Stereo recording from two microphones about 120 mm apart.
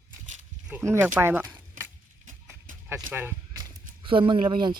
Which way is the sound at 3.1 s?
15° right (ahead or behind).